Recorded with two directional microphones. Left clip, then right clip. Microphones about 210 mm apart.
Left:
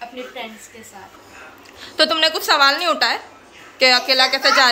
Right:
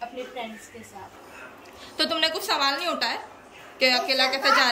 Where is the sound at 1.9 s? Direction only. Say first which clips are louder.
Left 8 dB; 5° right (ahead or behind).